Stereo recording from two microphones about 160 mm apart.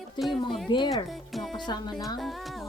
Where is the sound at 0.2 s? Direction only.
Centre (ahead or behind).